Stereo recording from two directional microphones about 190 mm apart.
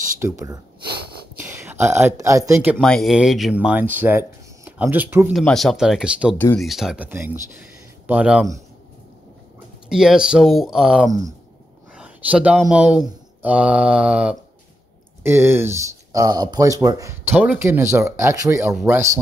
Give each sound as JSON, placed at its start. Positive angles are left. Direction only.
{"t": 0.2, "sound": "speech", "side_deg": -15}
{"t": 2.8, "sound": "speech", "side_deg": 0}
{"t": 5.3, "sound": "speech", "side_deg": 0}
{"t": 6.3, "sound": "speech", "side_deg": 10}
{"t": 6.6, "sound": "speech", "side_deg": 0}
{"t": 9.8, "sound": "speech", "side_deg": -5}
{"t": 11.1, "sound": "speech", "side_deg": -15}
{"t": 11.9, "sound": "speech", "side_deg": -5}